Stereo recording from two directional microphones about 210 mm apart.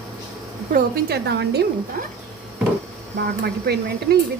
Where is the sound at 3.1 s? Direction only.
50° right (ahead or behind).